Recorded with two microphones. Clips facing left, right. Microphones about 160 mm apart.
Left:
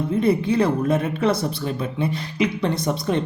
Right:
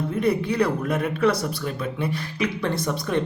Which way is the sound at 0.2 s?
25° left (ahead or behind).